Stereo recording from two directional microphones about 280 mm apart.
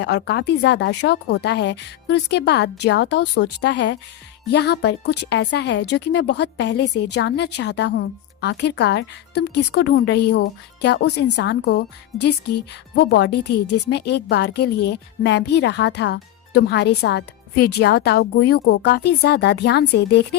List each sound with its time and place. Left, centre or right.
0.0 s a woman's voice: left